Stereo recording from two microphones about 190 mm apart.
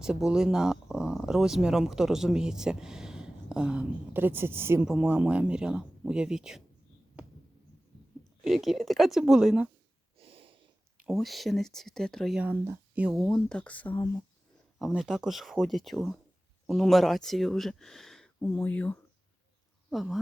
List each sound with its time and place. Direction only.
0.0 s speech: 5° right (ahead or behind)
8.4 s speech: centre (ahead or behind)
10.2 s snort: 30° right (ahead or behind)
11.0 s speech: centre (ahead or behind)